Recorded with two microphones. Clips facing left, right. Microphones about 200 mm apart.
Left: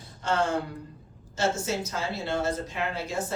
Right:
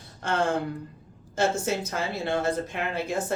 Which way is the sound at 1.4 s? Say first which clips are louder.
Right 2 dB; 55° right (ahead or behind).